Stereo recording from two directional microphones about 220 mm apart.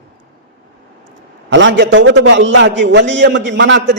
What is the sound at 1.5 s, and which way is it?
A man's voice, 60° right (ahead or behind).